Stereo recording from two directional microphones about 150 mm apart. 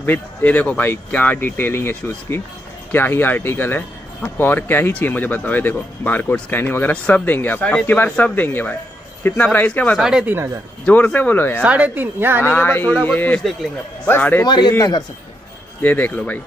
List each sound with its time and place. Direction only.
0.0 s speech: 10° left (ahead or behind)
9.9 s a woman's voice: 5° right (ahead or behind)
10.9 s speech: 10° left (ahead or behind)
11.6 s a woman's voice: 10° right (ahead or behind)
12.4 s speech: 15° left (ahead or behind)
14.4 s a man's voice: 30° left (ahead or behind)
15.8 s speech: 10° left (ahead or behind)